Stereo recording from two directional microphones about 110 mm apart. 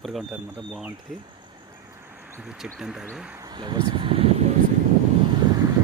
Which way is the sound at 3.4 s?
40° right (ahead or behind).